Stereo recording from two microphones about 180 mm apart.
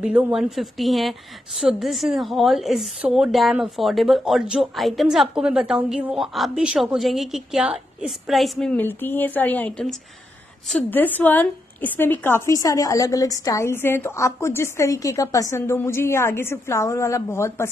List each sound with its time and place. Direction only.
0.0 s a woman's voice: 5° right (ahead or behind); by 17.6 s 15° left (ahead or behind)